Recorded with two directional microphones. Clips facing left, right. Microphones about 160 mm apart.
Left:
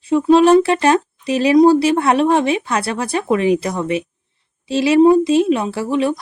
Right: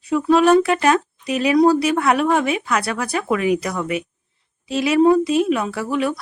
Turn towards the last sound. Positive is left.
turn(degrees=25)  # may be behind; listen again after turning